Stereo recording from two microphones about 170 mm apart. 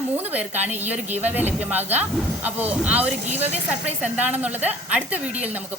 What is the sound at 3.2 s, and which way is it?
Speech, 40° right (ahead or behind).